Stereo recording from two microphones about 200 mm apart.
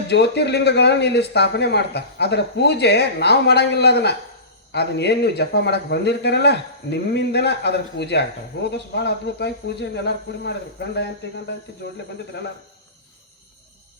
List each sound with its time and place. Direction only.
0.1 s speech: 60° left (ahead or behind)